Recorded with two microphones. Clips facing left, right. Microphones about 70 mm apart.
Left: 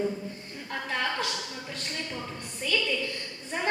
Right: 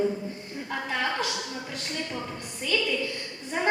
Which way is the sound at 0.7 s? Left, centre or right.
Centre.